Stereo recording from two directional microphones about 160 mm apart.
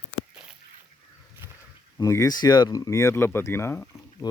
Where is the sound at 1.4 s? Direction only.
15° right (ahead or behind).